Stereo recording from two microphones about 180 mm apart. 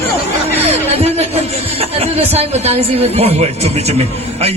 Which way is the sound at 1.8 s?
35° right (ahead or behind).